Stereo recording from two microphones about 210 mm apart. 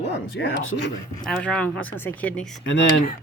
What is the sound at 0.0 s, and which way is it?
Speech, 60° left (ahead or behind).